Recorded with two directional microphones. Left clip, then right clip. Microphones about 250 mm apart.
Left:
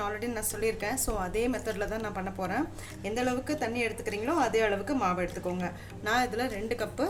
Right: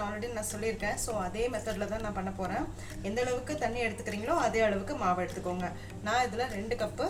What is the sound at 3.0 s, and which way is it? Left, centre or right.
A woman's voice, left.